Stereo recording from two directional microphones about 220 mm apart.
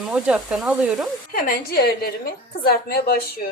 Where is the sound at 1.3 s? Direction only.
40° left (ahead or behind).